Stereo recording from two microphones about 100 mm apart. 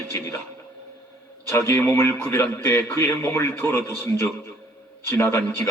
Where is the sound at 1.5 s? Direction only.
25° left (ahead or behind).